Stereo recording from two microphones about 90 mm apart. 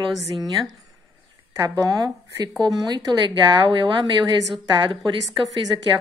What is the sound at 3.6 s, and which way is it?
A woman's voice, 65° right (ahead or behind).